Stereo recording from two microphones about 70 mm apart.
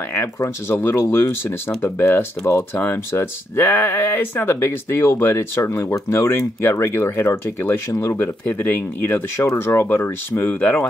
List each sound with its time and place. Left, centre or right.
0.1 s speech: left
10.5 s speech: left